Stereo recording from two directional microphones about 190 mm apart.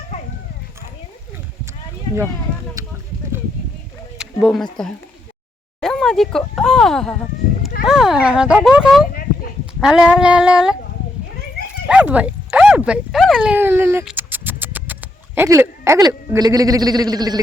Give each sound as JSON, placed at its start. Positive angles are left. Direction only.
{"t": 2.8, "sound": "a sound", "side_deg": -15}
{"t": 4.2, "sound": "speech", "side_deg": -5}
{"t": 5.8, "sound": "a sound", "side_deg": 0}
{"t": 6.6, "sound": "speech", "side_deg": 0}
{"t": 11.9, "sound": "speech", "side_deg": -5}
{"t": 14.0, "sound": "scratch", "side_deg": -5}
{"t": 15.4, "sound": "speech", "side_deg": -15}